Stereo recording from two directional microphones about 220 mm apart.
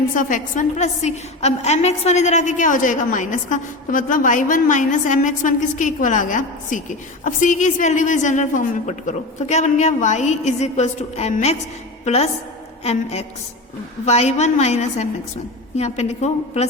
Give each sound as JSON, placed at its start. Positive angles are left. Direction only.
{"t": 0.2, "sound": "a woman's voice", "side_deg": 35}